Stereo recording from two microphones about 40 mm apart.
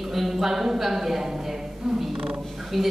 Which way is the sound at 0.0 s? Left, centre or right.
Centre.